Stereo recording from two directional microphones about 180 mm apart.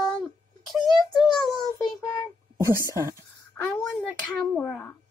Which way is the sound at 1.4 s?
Centre (ahead or behind).